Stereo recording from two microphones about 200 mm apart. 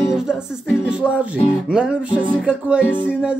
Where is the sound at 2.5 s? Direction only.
5° right (ahead or behind).